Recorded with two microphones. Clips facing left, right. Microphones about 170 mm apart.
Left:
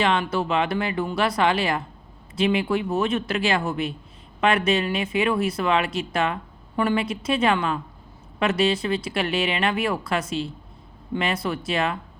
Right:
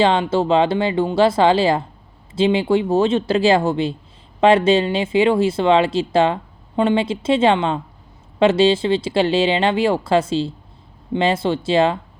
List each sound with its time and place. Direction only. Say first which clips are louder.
0.0 s speech: right 6 dB; 30° right (ahead or behind)